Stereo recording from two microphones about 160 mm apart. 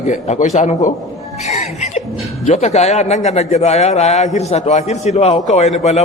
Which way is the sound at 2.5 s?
45° left (ahead or behind).